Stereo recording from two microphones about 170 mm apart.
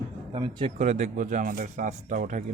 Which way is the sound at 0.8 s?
45° right (ahead or behind).